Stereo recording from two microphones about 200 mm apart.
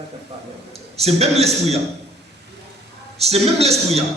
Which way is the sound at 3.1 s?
30° right (ahead or behind).